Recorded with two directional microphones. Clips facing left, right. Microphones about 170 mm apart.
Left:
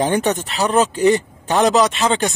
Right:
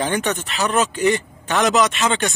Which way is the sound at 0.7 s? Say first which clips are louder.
Left 4 dB; 30° left (ahead or behind).